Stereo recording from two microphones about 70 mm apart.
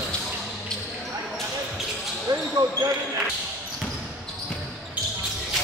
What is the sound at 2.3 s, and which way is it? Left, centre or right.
Basketball bounce, right.